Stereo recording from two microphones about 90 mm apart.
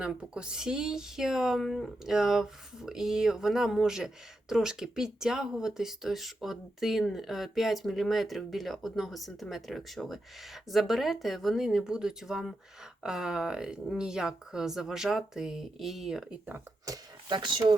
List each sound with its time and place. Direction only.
0.0 s a woman's voice: 10° right (ahead or behind)
16.8 s a sound: 40° right (ahead or behind)
17.3 s speech: 60° right (ahead or behind)